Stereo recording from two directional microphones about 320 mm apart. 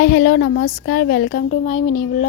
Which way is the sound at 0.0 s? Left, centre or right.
Left.